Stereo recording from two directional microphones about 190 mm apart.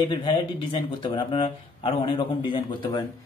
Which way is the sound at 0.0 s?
25° left (ahead or behind).